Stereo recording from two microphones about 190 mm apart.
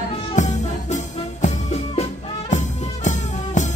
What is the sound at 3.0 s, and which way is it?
Music, 40° left (ahead or behind).